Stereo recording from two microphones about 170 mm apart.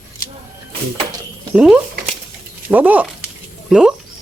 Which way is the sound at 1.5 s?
5° right (ahead or behind).